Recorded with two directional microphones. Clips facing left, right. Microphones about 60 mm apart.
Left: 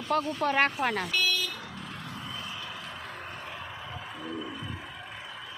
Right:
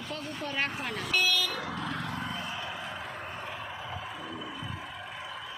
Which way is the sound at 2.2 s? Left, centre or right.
Right.